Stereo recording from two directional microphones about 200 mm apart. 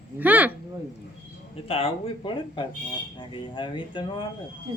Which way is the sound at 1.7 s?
25° left (ahead or behind).